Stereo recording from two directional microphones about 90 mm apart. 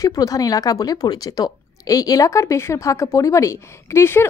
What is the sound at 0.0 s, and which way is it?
A woman's voice, 40° left (ahead or behind).